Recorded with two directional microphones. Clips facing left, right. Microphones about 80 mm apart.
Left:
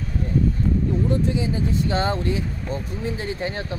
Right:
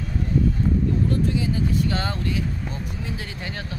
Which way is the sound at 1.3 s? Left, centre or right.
Left.